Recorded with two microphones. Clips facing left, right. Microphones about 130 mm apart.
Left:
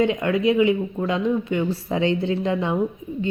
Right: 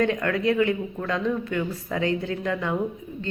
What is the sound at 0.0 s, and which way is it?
Speech, 20° left (ahead or behind).